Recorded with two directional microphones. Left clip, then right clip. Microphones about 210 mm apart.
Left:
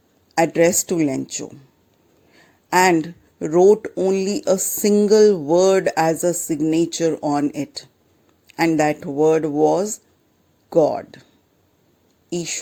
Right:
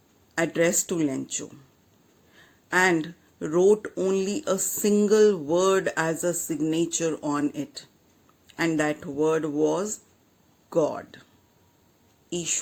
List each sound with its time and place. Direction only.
0.3 s a man's voice: 30° left (ahead or behind)